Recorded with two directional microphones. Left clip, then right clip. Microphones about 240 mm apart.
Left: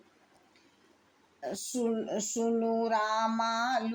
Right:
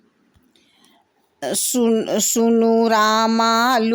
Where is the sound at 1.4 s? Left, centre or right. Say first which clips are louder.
Right 13 dB; right.